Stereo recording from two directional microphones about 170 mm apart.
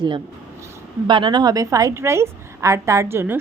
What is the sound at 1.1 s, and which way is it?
A woman's voice, 30° right (ahead or behind).